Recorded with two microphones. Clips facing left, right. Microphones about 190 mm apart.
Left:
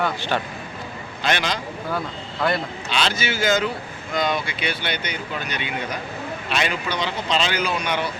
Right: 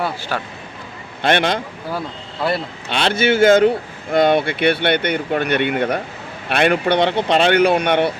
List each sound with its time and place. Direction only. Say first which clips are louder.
0.0 s speech: right 1 dB; 5° right (ahead or behind)
1.2 s speech: right 7 dB; 55° right (ahead or behind)
2.9 s speech: right 8 dB; 60° right (ahead or behind)